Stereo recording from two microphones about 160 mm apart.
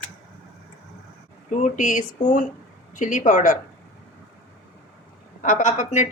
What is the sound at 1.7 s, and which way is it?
Speech, 55° left (ahead or behind).